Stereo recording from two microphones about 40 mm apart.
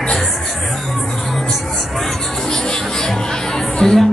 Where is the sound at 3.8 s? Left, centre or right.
Centre.